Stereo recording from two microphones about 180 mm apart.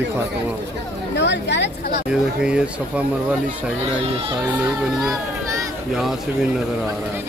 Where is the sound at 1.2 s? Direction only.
75° left (ahead or behind).